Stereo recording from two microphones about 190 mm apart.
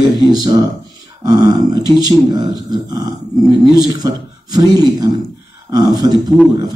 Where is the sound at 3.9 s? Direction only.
20° right (ahead or behind).